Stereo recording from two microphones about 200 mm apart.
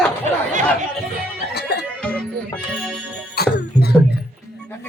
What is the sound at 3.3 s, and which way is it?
Music, 50° left (ahead or behind).